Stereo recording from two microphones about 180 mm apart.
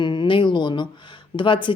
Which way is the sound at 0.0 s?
25° left (ahead or behind).